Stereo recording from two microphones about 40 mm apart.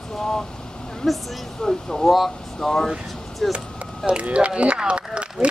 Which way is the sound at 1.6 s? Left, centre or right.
Centre.